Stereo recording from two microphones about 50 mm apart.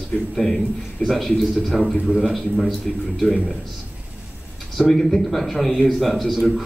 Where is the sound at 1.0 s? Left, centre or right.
Centre.